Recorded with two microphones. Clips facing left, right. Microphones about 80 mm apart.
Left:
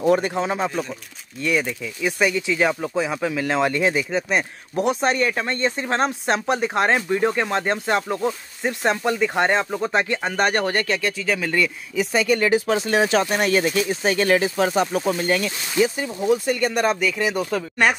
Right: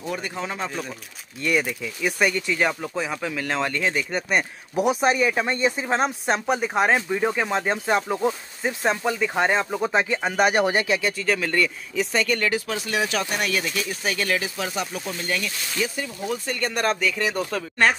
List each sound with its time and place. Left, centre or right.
0.0 s speech: left
0.3 s speech: left
0.7 s speech: centre
4.1 s speech: centre
12.4 s speech: left
15.7 s speech: left
16.4 s speech: centre